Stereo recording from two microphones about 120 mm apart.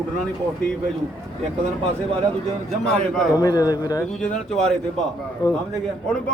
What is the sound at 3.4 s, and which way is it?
Speech, 30° left (ahead or behind).